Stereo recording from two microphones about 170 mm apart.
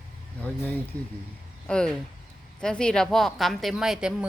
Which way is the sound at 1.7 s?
5° left (ahead or behind).